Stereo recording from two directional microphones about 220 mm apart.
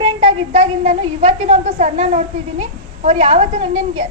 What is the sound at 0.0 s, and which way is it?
A woman's voice, 30° right (ahead or behind).